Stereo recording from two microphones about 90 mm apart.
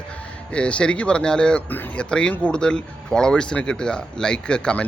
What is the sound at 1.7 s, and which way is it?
Speech, 20° left (ahead or behind).